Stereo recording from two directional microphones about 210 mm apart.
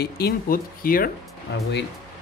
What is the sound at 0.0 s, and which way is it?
Speech, 45° left (ahead or behind).